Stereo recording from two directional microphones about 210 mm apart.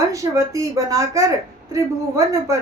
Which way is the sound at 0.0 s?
15° right (ahead or behind).